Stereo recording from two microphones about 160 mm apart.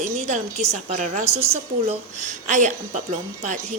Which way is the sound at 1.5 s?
40° right (ahead or behind).